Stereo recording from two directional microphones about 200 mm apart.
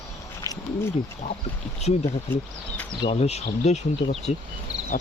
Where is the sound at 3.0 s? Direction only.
30° left (ahead or behind).